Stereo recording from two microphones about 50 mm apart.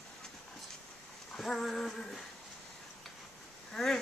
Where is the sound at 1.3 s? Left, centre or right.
Centre.